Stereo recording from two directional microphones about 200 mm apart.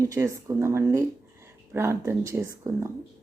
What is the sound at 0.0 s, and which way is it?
Speech, 15° right (ahead or behind).